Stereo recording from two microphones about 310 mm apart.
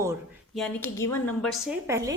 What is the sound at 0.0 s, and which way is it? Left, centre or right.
Speech, centre.